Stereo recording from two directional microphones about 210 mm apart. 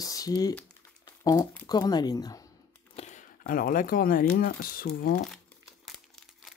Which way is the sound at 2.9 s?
35° left (ahead or behind).